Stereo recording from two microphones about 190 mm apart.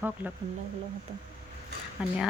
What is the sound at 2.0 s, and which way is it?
Speech, 5° right (ahead or behind).